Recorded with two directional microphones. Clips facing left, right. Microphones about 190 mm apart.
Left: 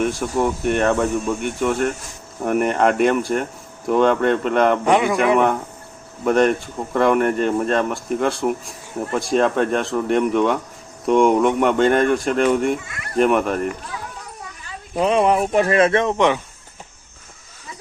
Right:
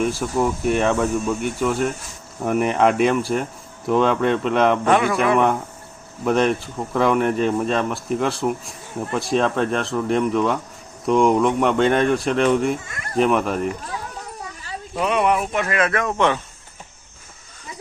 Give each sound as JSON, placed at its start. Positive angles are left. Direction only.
{"t": 0.0, "sound": "speech", "side_deg": 0}
{"t": 4.9, "sound": "speech", "side_deg": 15}
{"t": 6.2, "sound": "speech", "side_deg": 0}
{"t": 14.9, "sound": "speech", "side_deg": 30}